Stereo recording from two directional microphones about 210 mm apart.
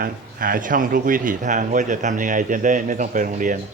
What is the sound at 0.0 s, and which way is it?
A man's voice, 45° right (ahead or behind).